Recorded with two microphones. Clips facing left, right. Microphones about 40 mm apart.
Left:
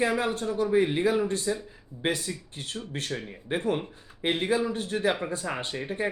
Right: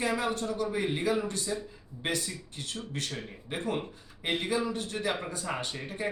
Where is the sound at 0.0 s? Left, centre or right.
Centre.